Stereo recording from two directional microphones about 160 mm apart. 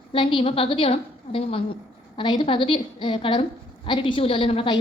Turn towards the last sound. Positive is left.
turn(degrees=35)  # may be behind; listen again after turning